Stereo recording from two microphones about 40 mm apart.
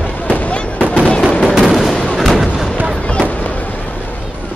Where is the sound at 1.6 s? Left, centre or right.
Centre.